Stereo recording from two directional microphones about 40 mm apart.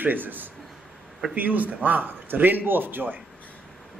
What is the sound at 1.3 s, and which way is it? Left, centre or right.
A man's voice, right.